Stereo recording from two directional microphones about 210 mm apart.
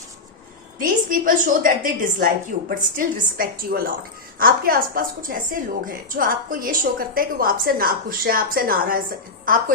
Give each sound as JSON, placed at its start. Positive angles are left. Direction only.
{"t": 0.8, "sound": "a woman's voice", "side_deg": -40}